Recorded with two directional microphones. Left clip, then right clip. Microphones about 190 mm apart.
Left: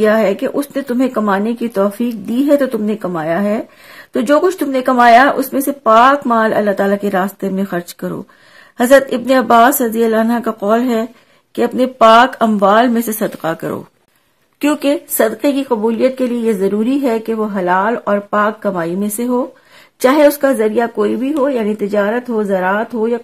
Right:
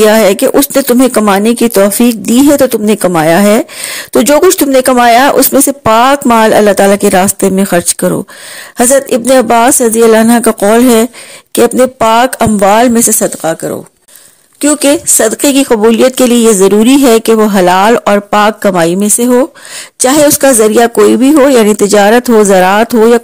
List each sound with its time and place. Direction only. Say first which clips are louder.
0.0 s speech: right 7 dB; 45° right (ahead or behind)
13.4 s a woman's voice: right 6 dB; 20° right (ahead or behind)
14.8 s speech: right 7 dB; 35° right (ahead or behind)
20.0 s a woman's voice: right 3 dB; 25° right (ahead or behind)
20.6 s speech: right 9 dB; 40° right (ahead or behind)